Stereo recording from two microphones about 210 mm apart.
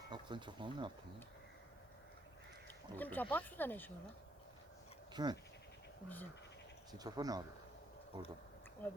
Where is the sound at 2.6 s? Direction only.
10° left (ahead or behind).